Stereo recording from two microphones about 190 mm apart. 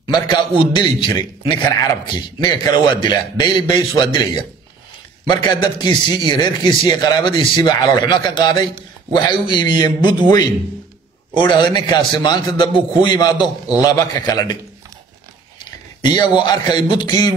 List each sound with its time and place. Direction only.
0.0 s a man's voice: 25° left (ahead or behind)
15.6 s a sound: 25° left (ahead or behind)
16.4 s a man's voice: 25° left (ahead or behind)